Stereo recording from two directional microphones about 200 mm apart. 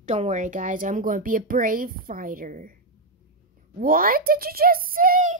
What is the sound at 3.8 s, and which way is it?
A child's voice, 45° right (ahead or behind).